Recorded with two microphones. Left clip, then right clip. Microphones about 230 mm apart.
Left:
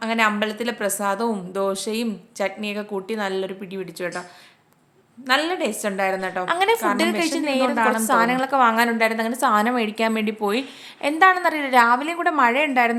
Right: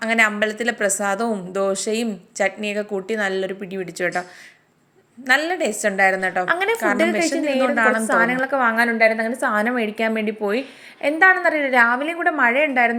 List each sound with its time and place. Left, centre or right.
0.0 s a woman's voice: centre
5.2 s a woman's voice: centre